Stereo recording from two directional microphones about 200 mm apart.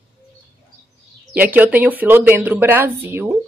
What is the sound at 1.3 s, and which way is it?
Speech, 10° right (ahead or behind).